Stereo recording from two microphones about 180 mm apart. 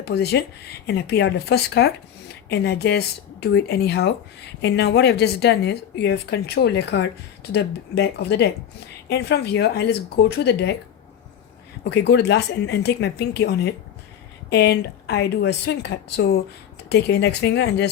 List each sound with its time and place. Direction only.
0.0 s a woman's voice: 65° left (ahead or behind)
11.9 s speech: 70° left (ahead or behind)